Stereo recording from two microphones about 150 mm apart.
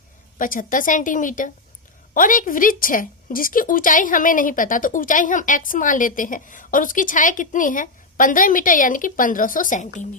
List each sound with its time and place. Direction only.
0.3 s a woman's voice: 65° left (ahead or behind)